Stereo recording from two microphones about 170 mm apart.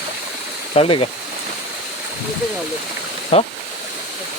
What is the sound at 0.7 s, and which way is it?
Speech, 35° left (ahead or behind).